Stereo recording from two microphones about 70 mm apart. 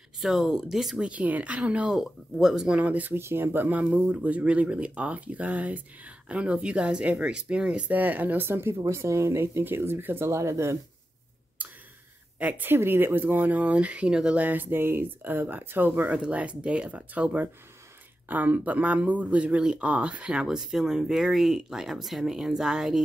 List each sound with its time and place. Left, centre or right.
0.2 s speech: centre
2.0 s speech: centre
2.8 s speech: right
3.2 s speech: right; by 7.8 s centre
7.9 s speech: right
12.4 s speech: right
14.4 s speech: right
16.1 s speech: centre